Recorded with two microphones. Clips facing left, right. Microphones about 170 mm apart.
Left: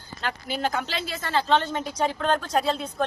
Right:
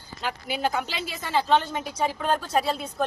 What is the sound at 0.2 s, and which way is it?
A woman's voice, 10° right (ahead or behind).